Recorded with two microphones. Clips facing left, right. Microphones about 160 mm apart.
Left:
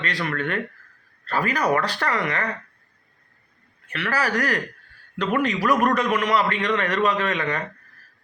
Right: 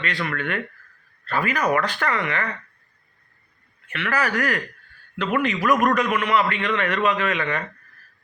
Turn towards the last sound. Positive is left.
turn(degrees=35)  # may be behind; listen again after turning